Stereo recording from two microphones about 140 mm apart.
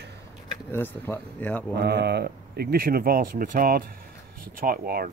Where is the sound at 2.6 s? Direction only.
90° right.